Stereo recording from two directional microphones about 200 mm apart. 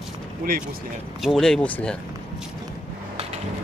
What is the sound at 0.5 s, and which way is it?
Speech, 45° right (ahead or behind).